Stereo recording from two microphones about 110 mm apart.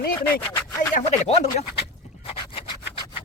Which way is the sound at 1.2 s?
80° left.